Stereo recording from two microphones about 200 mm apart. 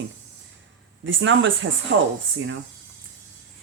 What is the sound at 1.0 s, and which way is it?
Speech, 70° right (ahead or behind).